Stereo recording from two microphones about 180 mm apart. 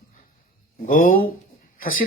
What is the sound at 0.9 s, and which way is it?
Speech, 50° left (ahead or behind).